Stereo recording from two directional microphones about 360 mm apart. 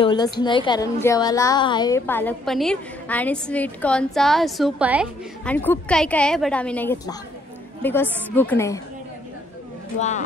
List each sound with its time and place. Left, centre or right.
0.0 s a woman's voice: centre
9.9 s speech: centre